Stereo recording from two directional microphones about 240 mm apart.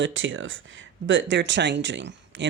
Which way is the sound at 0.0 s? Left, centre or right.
Right.